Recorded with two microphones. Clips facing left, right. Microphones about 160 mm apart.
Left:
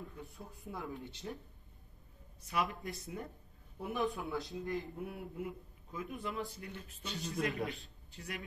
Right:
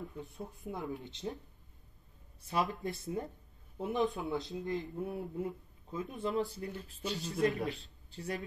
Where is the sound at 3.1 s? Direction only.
30° right (ahead or behind).